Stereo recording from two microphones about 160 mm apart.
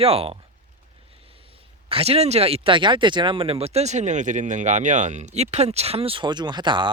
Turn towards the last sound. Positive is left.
turn(degrees=-30)  # may be behind; listen again after turning